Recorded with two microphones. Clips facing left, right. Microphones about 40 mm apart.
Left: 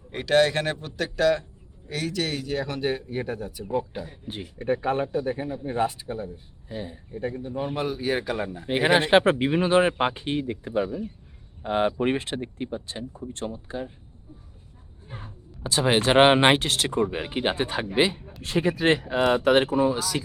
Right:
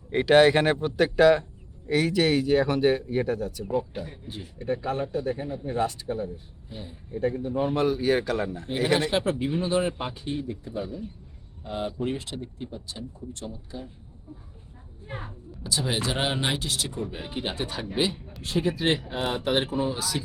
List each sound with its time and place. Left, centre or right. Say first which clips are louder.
0.1 s a man's voice: right 3 dB; centre
3.6 s a man's voice: even; centre
4.3 s speech: left 3 dB; left
4.5 s speech: left 3 dB; left
5.1 s a man's voice: left 2 dB; centre
6.7 s speech: left 6 dB; left
7.3 s speech: right 4 dB; centre
8.6 s speech: left 8 dB; left
9.0 s speech: left 6 dB; left
15.0 s a sound: right 5 dB; right
15.6 s speech: left 6 dB; left
18.4 s speech: left 3 dB; left
19.0 s speech: left 7 dB; left
20.0 s speech: left 2 dB; left